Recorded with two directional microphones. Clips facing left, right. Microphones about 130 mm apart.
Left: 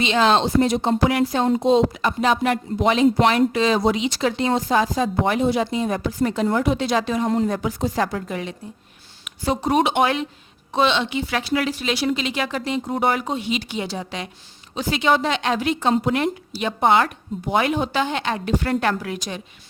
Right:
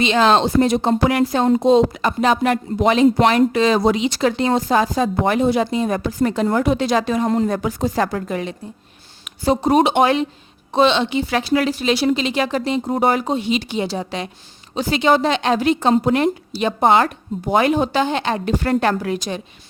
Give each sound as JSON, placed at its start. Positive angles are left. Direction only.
{"t": 0.0, "sound": "speech", "side_deg": -45}
{"t": 9.2, "sound": "speech", "side_deg": -35}